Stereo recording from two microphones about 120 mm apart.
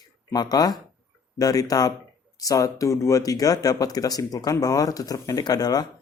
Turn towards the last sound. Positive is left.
turn(degrees=30)  # may be behind; listen again after turning